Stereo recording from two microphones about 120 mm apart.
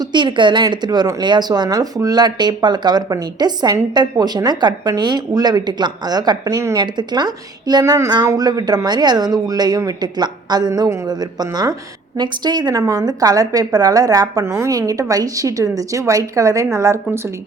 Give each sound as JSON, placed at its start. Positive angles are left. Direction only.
{"t": 0.1, "sound": "a woman's voice", "side_deg": -40}